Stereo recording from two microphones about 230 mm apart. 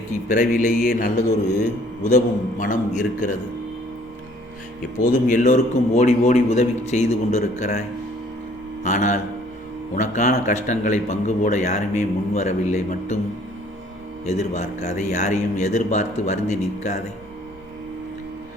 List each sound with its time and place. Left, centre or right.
0.3 s a man's voice: left
5.3 s a man's voice: left
8.8 s a man's voice: left
14.3 s a man's voice: left